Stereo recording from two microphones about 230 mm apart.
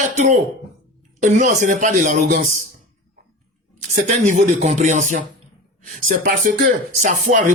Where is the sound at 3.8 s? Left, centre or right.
Right.